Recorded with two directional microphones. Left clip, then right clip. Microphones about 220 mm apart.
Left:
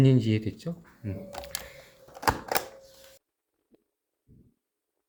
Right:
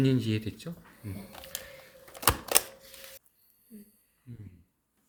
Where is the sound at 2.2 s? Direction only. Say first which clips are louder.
Left 1 dB; 20° right (ahead or behind).